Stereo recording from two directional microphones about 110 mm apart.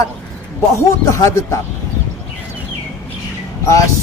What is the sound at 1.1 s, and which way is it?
Speech, 30° left (ahead or behind).